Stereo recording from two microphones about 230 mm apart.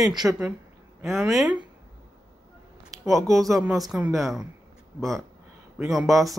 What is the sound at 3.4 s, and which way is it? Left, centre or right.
Speech, centre.